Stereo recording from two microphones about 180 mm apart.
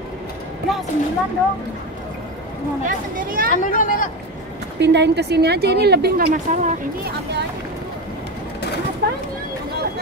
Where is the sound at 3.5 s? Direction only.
45° left (ahead or behind).